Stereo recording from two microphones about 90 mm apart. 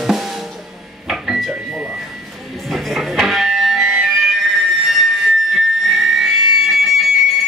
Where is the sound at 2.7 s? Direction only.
5° right (ahead or behind).